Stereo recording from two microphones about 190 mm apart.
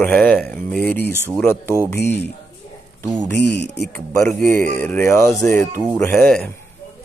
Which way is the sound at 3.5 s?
60° left (ahead or behind).